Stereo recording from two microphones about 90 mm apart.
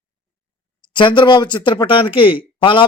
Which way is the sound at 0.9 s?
65° left (ahead or behind).